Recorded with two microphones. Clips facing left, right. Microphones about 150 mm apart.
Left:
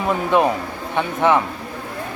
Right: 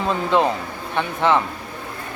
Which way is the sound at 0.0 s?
15° left (ahead or behind).